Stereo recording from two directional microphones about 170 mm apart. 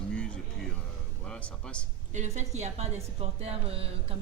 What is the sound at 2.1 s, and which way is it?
A woman's voice, 40° right (ahead or behind).